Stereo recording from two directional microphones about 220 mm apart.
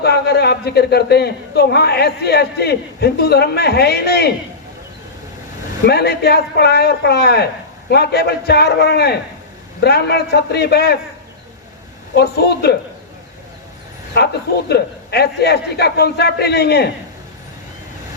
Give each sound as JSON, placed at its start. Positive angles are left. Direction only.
{"t": 0.0, "sound": "a man's voice", "side_deg": 45}
{"t": 5.8, "sound": "a man's voice", "side_deg": 45}
{"t": 12.1, "sound": "a man's voice", "side_deg": 45}
{"t": 14.1, "sound": "a man's voice", "side_deg": 50}